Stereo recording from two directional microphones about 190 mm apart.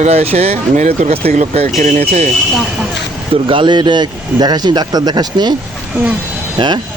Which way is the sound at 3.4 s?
25° right (ahead or behind).